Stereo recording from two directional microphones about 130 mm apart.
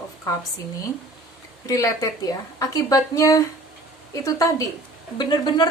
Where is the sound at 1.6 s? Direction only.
25° left (ahead or behind).